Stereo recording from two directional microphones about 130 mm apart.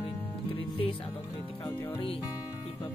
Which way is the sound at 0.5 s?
45° left (ahead or behind).